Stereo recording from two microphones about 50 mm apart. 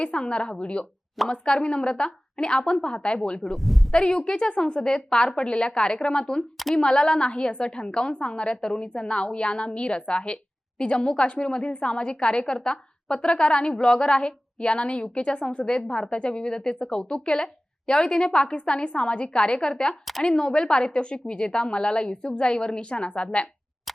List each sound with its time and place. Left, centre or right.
0.0 s a woman's voice: left
3.4 s speech: centre
3.9 s a woman's voice: centre